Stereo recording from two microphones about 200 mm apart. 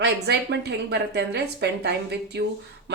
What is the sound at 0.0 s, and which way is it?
A woman's voice, 55° right (ahead or behind).